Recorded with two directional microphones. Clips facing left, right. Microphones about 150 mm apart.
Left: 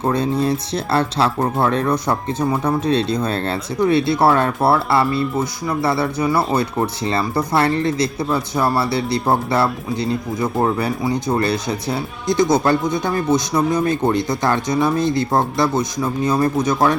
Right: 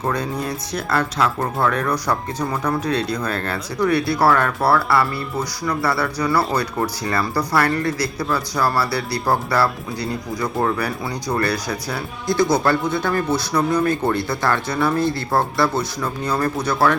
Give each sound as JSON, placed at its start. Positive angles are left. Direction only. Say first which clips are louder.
{"t": 0.0, "sound": "speech", "louder": "left 5 dB", "side_deg": 25}